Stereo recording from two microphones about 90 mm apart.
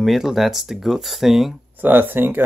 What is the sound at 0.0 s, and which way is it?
Speech, centre (ahead or behind).